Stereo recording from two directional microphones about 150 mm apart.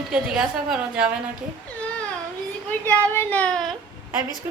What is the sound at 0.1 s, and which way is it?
A woman's voice, 5° right (ahead or behind).